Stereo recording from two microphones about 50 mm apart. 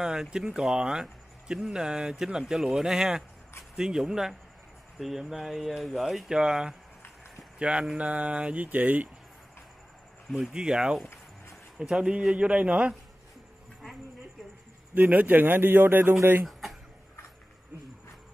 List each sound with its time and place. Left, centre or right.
0.0 s a man's voice: centre; by 9.1 s right
10.5 s a man's voice: centre
15.0 s speech: right
16.6 s a sound: centre